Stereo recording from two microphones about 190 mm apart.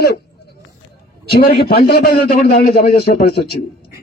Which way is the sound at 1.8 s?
55° left (ahead or behind).